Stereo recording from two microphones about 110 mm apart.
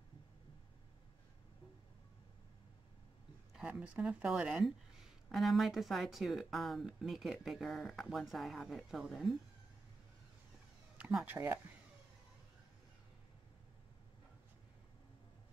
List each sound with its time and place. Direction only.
3.5 s a woman's voice: 10° right (ahead or behind)
11.0 s a sound: 5° right (ahead or behind)
11.2 s speech: 20° right (ahead or behind)